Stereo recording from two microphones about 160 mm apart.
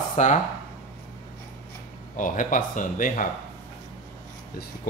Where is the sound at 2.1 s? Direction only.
55° left (ahead or behind).